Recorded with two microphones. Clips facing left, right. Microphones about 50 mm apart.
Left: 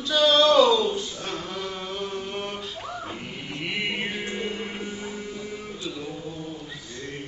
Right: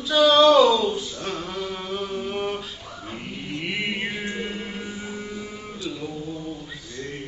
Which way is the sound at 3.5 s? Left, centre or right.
Centre.